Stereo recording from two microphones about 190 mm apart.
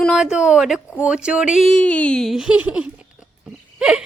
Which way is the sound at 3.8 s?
5° right (ahead or behind).